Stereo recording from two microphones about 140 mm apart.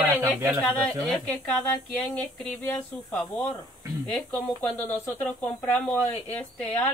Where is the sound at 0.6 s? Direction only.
Centre (ahead or behind).